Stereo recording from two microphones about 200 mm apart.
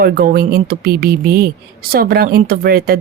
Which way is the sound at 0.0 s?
50° right (ahead or behind).